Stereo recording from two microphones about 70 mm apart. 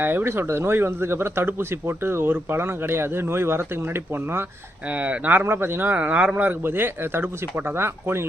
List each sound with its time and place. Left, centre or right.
0.0 s speech: right
4.9 s speech: right